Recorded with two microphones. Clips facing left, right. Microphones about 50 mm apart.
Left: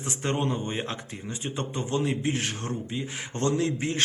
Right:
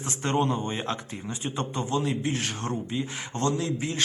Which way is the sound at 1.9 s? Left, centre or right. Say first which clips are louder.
Left 2 dB; left.